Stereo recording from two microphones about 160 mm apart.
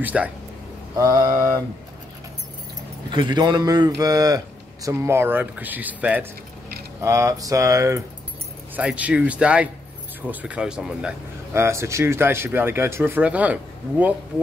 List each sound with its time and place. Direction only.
0.0 s speech: 10° right (ahead or behind)
0.9 s speech: 20° right (ahead or behind)
3.1 s speech: 25° right (ahead or behind); by 11.1 s 5° right (ahead or behind)
11.5 s speech: 15° right (ahead or behind)